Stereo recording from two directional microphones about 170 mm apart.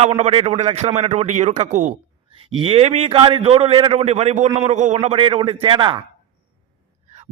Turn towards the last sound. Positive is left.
turn(degrees=-30)  # may be behind; listen again after turning